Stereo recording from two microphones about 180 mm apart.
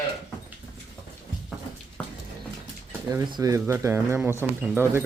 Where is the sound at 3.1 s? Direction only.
20° right (ahead or behind).